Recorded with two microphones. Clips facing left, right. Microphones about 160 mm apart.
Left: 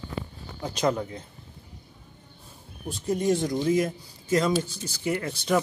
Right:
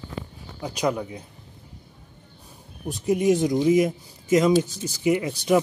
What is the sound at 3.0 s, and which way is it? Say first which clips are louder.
Speech: right 4 dB; 15° right (ahead or behind).